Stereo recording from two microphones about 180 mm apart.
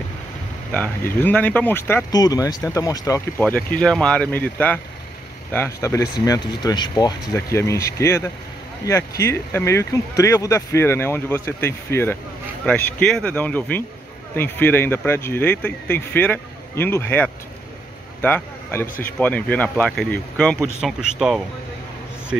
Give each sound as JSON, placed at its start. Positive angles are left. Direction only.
{"t": 0.7, "sound": "speech", "side_deg": 10}